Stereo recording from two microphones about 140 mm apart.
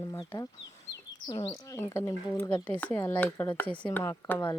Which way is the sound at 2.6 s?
10° left (ahead or behind).